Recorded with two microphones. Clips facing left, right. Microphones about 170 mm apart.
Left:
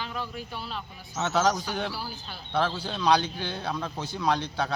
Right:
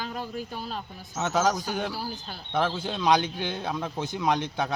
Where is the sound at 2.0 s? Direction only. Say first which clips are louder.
Right 3 dB; 45° right (ahead or behind).